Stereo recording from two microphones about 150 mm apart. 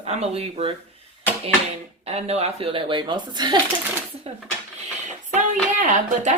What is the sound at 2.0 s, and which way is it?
Speech, 45° right (ahead or behind).